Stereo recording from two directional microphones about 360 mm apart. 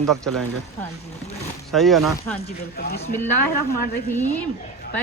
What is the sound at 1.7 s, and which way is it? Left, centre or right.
Speech, centre.